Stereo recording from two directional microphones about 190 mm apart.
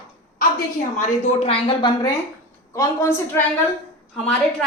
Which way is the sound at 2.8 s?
15° left (ahead or behind).